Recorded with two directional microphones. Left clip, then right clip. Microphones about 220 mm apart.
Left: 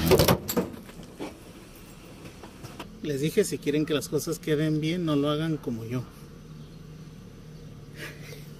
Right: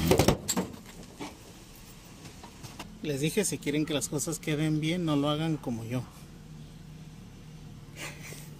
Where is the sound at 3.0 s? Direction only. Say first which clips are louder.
Left 4 dB; 15° right (ahead or behind).